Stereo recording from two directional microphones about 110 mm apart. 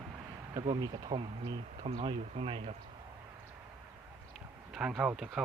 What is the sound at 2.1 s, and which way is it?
Speech, 70° right (ahead or behind).